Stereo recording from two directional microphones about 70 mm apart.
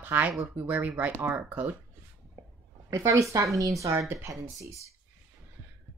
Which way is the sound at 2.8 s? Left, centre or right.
Right.